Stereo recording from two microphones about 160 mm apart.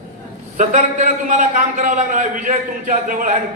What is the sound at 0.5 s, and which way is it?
A man's voice, 55° right (ahead or behind).